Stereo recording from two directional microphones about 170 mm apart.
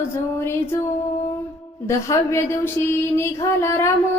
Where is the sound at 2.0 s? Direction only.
15° left (ahead or behind).